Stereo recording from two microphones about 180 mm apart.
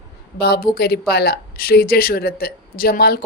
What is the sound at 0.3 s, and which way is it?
Speech, 60° left (ahead or behind).